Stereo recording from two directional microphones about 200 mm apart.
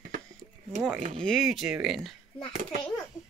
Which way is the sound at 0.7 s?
Centre (ahead or behind).